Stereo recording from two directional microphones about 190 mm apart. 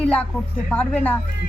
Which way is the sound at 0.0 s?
5° left (ahead or behind).